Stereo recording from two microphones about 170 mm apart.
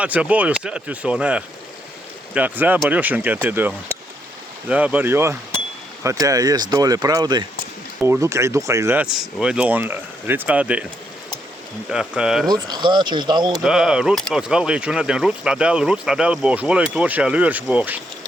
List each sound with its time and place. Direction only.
0.0 s speech: 5° right (ahead or behind)
9.1 s speech: 5° right (ahead or behind)
11.9 s speech: 5° right (ahead or behind)
12.5 s speech: 25° right (ahead or behind)
13.6 s speech: 5° right (ahead or behind)